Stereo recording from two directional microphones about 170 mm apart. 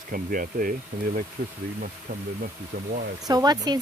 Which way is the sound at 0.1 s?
55° right (ahead or behind).